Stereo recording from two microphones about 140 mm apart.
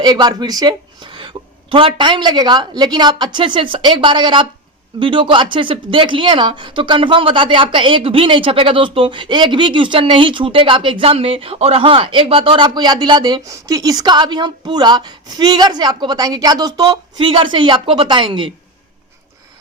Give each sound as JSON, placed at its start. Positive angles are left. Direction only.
{"t": 0.0, "sound": "speech", "side_deg": -30}